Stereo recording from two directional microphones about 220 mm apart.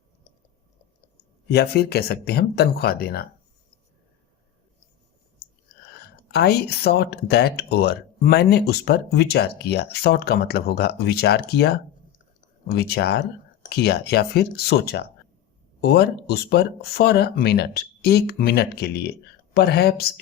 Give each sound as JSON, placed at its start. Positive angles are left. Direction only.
{"t": 1.1, "sound": "speech", "side_deg": 45}
{"t": 6.1, "sound": "speech", "side_deg": 50}